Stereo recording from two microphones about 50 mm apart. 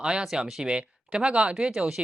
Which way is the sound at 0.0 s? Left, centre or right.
Centre.